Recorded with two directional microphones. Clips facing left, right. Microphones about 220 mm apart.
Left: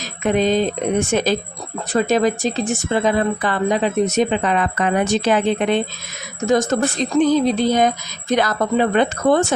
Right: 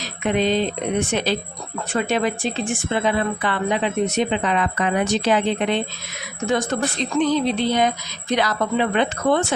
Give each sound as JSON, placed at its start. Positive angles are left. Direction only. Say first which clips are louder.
{"t": 0.0, "sound": "speech", "louder": "left 3 dB", "side_deg": 45}